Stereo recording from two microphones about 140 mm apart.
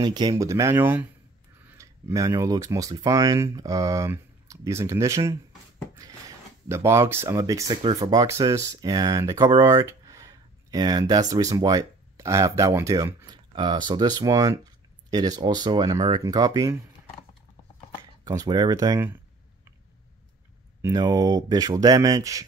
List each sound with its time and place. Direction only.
0.0 s speech: 30° right (ahead or behind)
18.2 s speech: 25° right (ahead or behind)
20.9 s speech: 25° right (ahead or behind)